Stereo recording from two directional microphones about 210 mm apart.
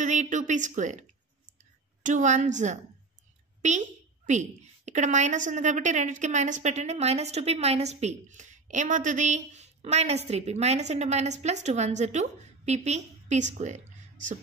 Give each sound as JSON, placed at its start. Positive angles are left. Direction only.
{"t": 0.0, "sound": "a woman's voice", "side_deg": -35}
{"t": 2.0, "sound": "a woman's voice", "side_deg": -35}